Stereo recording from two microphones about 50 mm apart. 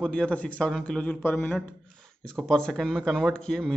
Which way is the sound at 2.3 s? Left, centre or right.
Centre.